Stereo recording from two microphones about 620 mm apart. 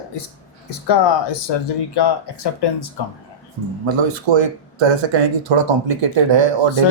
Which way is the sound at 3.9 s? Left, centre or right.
Right.